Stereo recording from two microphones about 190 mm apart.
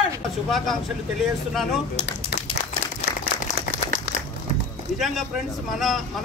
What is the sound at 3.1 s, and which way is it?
Applause, 60° left (ahead or behind).